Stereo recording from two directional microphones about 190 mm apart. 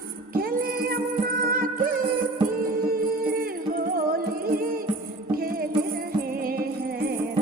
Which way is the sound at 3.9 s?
50° right (ahead or behind).